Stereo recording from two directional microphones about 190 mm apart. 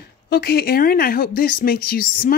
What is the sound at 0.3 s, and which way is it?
A woman's voice, 60° left (ahead or behind).